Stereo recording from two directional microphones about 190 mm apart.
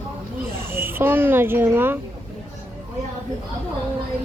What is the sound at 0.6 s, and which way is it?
A child's voice, 10° right (ahead or behind).